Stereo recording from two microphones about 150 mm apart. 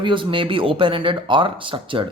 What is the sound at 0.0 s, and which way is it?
Speech, 35° right (ahead or behind).